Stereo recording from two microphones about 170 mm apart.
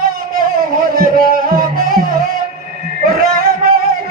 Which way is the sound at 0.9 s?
55° right (ahead or behind).